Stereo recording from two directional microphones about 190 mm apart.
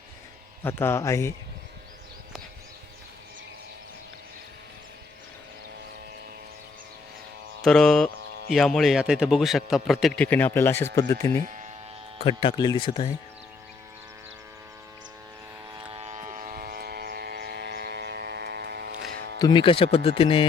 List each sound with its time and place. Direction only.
0.6 s speech: 10° left (ahead or behind)
7.6 s speech: 5° left (ahead or behind)
11.4 s a sound: 40° right (ahead or behind)
12.2 s speech: 25° left (ahead or behind)
15.9 s vehicle: 30° right (ahead or behind); by 18.9 s 55° right (ahead or behind)
18.9 s music: 50° right (ahead or behind)
19.4 s speech: 25° left (ahead or behind)